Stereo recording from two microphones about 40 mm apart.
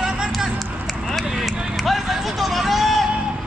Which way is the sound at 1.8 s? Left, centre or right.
Centre.